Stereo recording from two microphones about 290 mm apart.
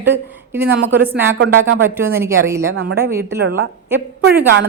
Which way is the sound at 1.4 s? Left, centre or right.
Right.